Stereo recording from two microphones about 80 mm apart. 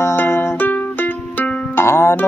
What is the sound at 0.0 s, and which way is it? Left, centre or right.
Music, left.